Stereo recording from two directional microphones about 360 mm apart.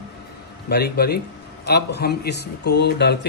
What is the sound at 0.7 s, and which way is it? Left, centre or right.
Speech, left.